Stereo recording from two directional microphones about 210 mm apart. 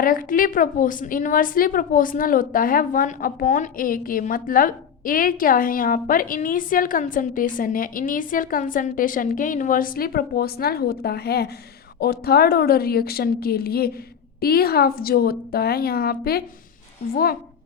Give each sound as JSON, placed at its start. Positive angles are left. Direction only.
{"t": 0.0, "sound": "a woman's voice", "side_deg": 40}